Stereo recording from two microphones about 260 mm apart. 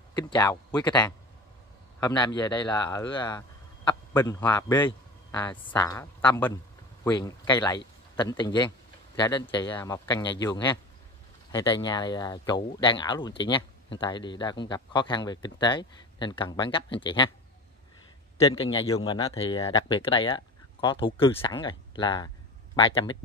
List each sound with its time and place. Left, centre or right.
0.1 s a man's voice: centre
18.5 s speech: left